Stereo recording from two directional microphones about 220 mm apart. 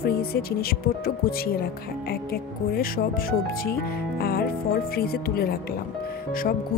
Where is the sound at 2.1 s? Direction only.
45° left (ahead or behind).